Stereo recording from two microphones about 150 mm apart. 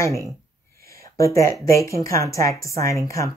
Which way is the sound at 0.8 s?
20° left (ahead or behind).